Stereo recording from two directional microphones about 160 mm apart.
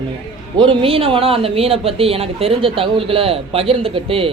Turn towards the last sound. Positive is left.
turn(degrees=-35)  # may be behind; listen again after turning